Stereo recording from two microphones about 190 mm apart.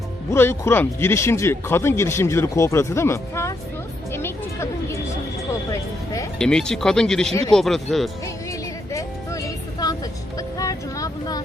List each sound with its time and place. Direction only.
0.3 s speech: 15° left (ahead or behind)
4.1 s a sound: 15° left (ahead or behind)
6.4 s speech: 5° left (ahead or behind)
8.4 s music: 15° left (ahead or behind)